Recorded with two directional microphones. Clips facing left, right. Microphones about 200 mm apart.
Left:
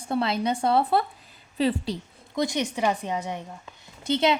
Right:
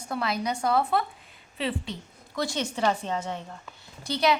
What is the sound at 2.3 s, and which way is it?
A woman's voice, 15° left (ahead or behind).